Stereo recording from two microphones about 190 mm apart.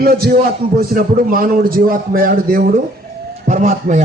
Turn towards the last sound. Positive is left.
turn(degrees=-40)  # may be behind; listen again after turning